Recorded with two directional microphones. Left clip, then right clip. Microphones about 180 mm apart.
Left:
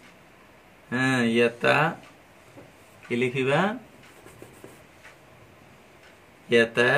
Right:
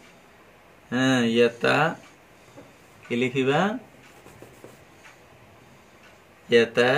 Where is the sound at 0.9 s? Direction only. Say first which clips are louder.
Right 1 dB; 20° left (ahead or behind).